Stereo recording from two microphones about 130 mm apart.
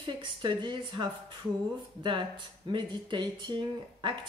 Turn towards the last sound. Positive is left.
turn(degrees=-40)  # may be behind; listen again after turning